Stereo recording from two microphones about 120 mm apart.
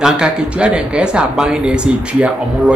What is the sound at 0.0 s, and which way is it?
Speech, 5° right (ahead or behind).